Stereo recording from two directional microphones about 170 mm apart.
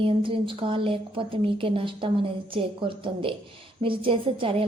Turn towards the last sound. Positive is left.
turn(degrees=-30)  # may be behind; listen again after turning